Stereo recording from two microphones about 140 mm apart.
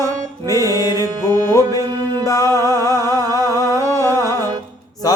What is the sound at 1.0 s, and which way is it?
Music, 25° left (ahead or behind).